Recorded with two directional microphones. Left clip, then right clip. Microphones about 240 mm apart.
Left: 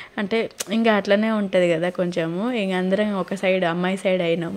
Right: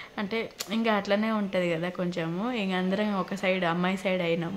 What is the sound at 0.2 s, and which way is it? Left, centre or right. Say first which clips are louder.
A woman's voice: left 8 dB; left.